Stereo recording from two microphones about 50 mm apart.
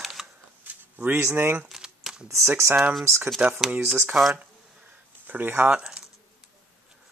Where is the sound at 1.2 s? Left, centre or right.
Right.